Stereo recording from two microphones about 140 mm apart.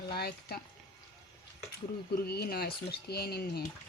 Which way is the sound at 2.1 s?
90° left.